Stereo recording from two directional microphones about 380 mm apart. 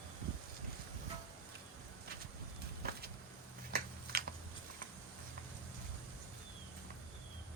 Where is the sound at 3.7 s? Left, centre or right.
Right.